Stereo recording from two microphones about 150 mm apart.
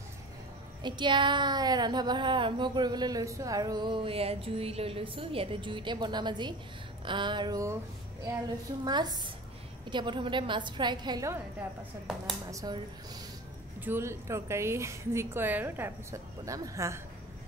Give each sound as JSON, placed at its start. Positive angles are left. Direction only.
{"t": 0.8, "sound": "speech", "side_deg": -30}
{"t": 8.8, "sound": "speech", "side_deg": -25}
{"t": 12.4, "sound": "speech", "side_deg": -25}
{"t": 13.7, "sound": "a woman's voice", "side_deg": -15}